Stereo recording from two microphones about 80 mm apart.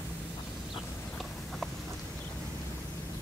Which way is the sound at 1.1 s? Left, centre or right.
Centre.